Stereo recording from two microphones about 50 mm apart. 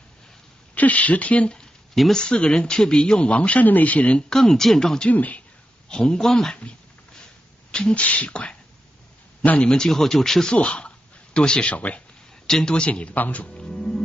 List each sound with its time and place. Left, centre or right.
0.7 s speech: left
4.2 s speech: centre
5.1 s speech: left
5.9 s speech: centre
7.9 s speech: left
9.6 s speech: centre
10.5 s speech: left
12.4 s speech: centre
12.7 s speech: left
13.1 s speech: left
13.6 s music: centre